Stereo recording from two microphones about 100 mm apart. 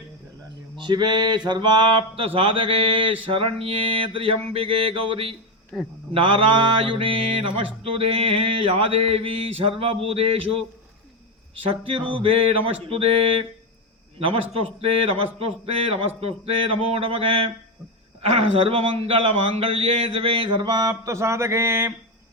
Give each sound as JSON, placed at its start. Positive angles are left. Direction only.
{"t": 0.8, "sound": "a sound", "side_deg": -50}
{"t": 1.5, "sound": "a man's voice", "side_deg": -50}
{"t": 5.7, "sound": "a man's voice", "side_deg": 5}
{"t": 6.1, "sound": "mantra", "side_deg": -60}
{"t": 11.7, "sound": "a man's voice", "side_deg": -65}
{"t": 14.2, "sound": "mantra", "side_deg": -65}
{"t": 18.2, "sound": "a man's voice", "side_deg": -80}